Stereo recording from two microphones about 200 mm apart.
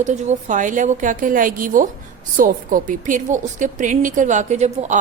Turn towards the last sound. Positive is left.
turn(degrees=-35)  # may be behind; listen again after turning